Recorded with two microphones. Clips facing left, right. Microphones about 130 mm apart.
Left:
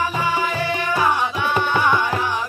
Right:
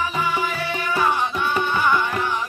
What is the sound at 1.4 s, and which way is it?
Music, 70° left (ahead or behind).